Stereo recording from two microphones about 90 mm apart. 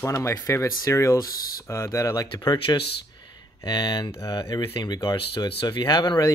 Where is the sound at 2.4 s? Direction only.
55° left (ahead or behind).